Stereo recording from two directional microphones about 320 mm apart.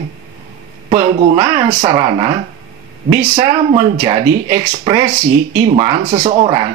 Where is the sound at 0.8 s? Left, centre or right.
Centre.